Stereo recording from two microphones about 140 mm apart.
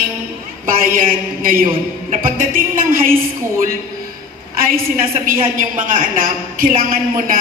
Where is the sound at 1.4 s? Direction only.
85° right.